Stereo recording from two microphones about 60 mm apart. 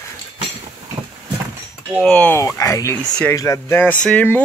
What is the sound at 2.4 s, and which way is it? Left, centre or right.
Speech, left.